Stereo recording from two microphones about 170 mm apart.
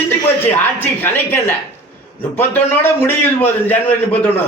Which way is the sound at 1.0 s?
15° left (ahead or behind).